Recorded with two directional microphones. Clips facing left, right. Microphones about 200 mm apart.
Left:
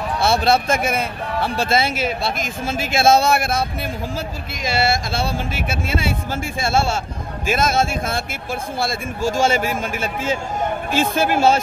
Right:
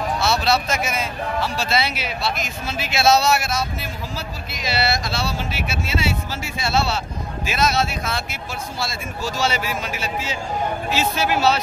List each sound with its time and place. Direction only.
0.2 s speech: 50° left (ahead or behind)